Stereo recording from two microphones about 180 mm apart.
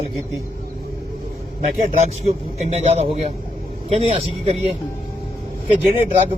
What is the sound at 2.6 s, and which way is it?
A man's voice, 35° right (ahead or behind).